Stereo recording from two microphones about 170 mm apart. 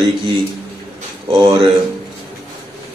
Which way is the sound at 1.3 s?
30° right (ahead or behind).